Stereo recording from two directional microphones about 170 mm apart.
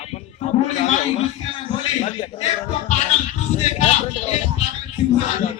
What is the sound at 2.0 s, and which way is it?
Speech, 40° left (ahead or behind).